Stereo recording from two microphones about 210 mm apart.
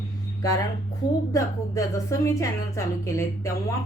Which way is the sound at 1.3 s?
15° left (ahead or behind).